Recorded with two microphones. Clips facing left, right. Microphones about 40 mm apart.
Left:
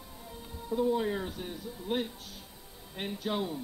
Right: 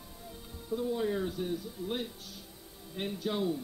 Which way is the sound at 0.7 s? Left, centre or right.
Centre.